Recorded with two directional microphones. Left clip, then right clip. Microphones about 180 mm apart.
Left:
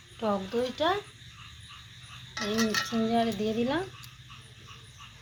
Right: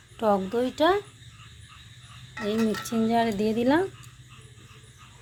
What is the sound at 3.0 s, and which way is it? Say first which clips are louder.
Speech: right 8 dB; 70° right (ahead or behind).